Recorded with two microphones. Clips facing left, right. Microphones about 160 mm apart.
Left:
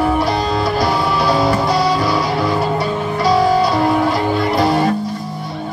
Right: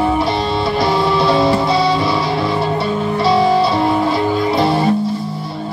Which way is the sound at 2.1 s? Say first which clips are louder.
Even; 25° right (ahead or behind).